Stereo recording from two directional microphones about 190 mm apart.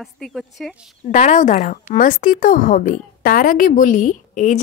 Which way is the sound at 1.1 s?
40° left (ahead or behind).